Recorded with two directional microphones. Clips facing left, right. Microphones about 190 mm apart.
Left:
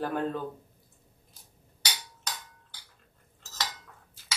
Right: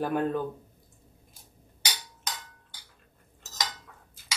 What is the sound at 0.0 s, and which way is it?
Speech, 15° right (ahead or behind).